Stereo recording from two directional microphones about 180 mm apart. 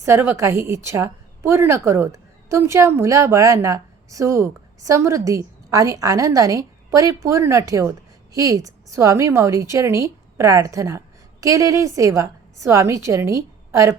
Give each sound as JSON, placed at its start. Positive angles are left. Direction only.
{"t": 0.0, "sound": "a woman's voice", "side_deg": -15}